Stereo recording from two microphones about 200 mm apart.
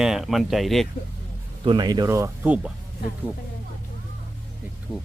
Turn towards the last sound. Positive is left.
turn(degrees=-5)  # may be behind; listen again after turning